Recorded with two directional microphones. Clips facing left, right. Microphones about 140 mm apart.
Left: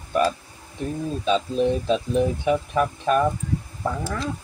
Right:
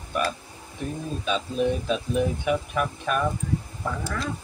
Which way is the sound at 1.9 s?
30° left (ahead or behind).